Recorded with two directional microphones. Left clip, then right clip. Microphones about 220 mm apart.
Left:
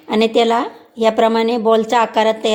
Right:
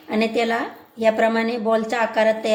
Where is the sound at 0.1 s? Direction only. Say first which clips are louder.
Left 7 dB; 35° left (ahead or behind).